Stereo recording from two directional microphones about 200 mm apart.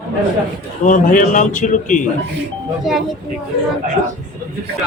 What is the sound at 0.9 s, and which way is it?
A man's voice, 40° left (ahead or behind).